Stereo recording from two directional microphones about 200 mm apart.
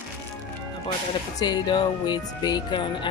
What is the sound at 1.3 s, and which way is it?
Speech, 20° left (ahead or behind).